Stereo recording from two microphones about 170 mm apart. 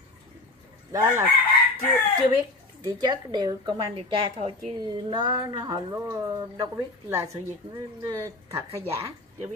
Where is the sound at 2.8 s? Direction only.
25° right (ahead or behind).